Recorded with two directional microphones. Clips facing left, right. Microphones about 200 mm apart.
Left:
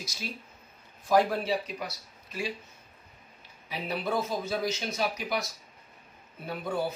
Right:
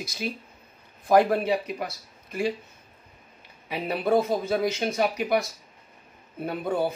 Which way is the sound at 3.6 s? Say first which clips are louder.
Right 6 dB; 60° right (ahead or behind).